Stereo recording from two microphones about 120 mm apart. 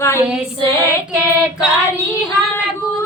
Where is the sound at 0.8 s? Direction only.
20° left (ahead or behind).